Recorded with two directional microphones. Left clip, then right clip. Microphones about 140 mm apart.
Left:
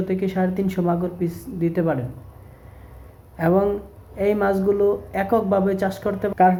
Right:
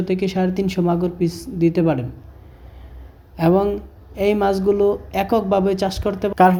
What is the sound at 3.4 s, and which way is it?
Speech, 30° right (ahead or behind).